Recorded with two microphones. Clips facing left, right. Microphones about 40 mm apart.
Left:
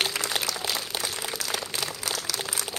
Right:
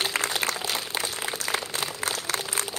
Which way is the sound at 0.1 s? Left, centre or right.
Right.